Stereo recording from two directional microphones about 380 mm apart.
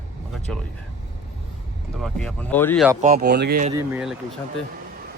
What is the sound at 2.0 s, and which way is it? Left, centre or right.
Speech, centre.